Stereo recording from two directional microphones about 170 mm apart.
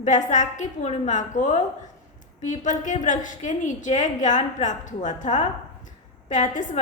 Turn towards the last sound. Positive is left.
turn(degrees=45)  # may be behind; listen again after turning